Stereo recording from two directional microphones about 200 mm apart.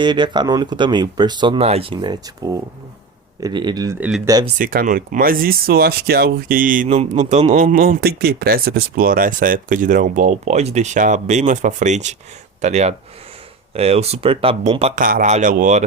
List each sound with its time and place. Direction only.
0.0 s speech: 20° right (ahead or behind)
4.5 s speech: 45° right (ahead or behind)
15.0 s speech: 40° right (ahead or behind)